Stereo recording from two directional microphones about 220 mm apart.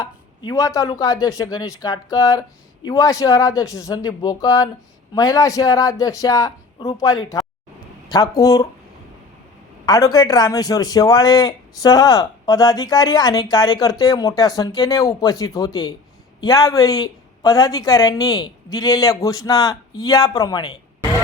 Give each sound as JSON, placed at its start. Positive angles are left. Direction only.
{"t": 0.0, "sound": "a man's voice", "side_deg": 15}
{"t": 9.8, "sound": "a man's voice", "side_deg": 15}